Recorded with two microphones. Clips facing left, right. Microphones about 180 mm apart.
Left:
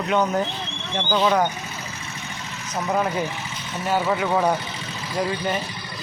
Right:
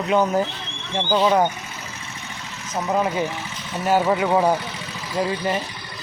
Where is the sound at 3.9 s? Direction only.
15° right (ahead or behind).